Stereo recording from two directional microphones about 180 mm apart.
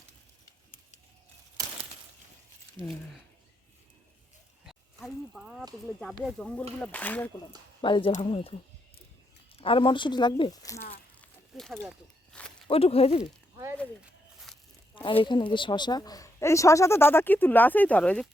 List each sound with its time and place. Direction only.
2.7 s speech: centre (ahead or behind)
4.6 s a sound: centre (ahead or behind)
6.0 s a woman's voice: centre (ahead or behind)
7.8 s speech: 25° left (ahead or behind)
9.6 s speech: 30° left (ahead or behind)
11.2 s walk: centre (ahead or behind)
12.6 s speech: 30° left (ahead or behind)
14.0 s a sound: centre (ahead or behind)
14.9 s a woman's voice: 25° left (ahead or behind); by 18.3 s 5° left (ahead or behind)